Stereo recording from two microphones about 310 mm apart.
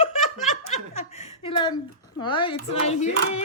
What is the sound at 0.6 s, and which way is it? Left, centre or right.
Chuckle, left.